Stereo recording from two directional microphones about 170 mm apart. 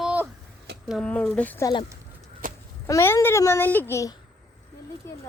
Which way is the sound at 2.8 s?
15° left (ahead or behind).